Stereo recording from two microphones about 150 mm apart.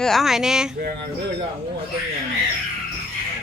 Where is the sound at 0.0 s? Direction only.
Centre (ahead or behind).